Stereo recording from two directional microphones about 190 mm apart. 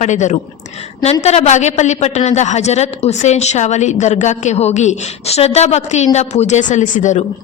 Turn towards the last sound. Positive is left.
turn(degrees=40)  # may be behind; listen again after turning